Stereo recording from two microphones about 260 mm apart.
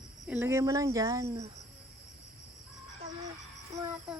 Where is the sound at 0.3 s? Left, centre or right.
Centre.